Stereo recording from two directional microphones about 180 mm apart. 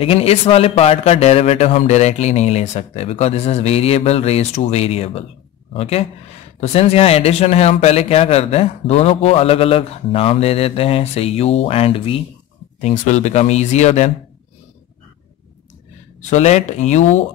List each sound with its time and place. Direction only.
0.0 s speech: 35° left (ahead or behind)
12.8 s speech: 40° left (ahead or behind)
16.2 s speech: 40° left (ahead or behind)